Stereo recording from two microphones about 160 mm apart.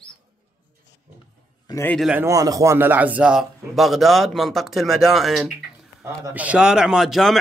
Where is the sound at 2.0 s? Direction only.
5° right (ahead or behind).